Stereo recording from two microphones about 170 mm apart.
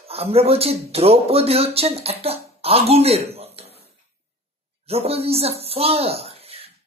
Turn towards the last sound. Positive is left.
turn(degrees=-35)  # may be behind; listen again after turning